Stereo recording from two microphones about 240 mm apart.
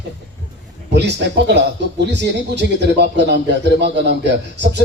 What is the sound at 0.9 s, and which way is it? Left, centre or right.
Speech, right.